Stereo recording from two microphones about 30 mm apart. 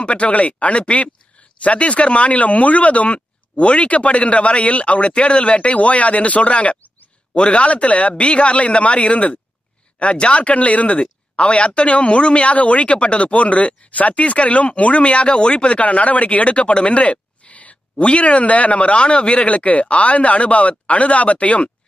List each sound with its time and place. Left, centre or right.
0.0 s speech: left
7.3 s speech: left
11.0 s speech: left